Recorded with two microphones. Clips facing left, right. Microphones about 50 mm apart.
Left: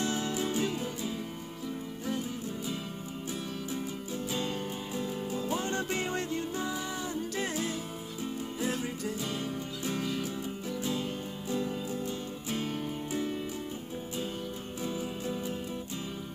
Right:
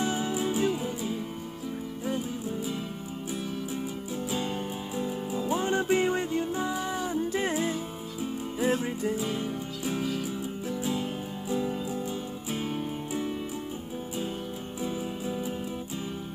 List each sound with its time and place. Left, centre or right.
0.0 s music: centre
4.3 s music: centre
14.8 s music: centre